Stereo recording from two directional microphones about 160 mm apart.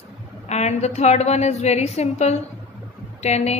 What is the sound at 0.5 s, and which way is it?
A woman's voice, 45° left (ahead or behind).